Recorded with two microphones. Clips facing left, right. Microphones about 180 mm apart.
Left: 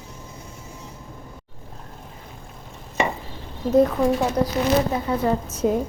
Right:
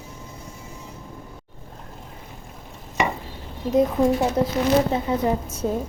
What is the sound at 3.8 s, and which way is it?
Speech, 20° right (ahead or behind).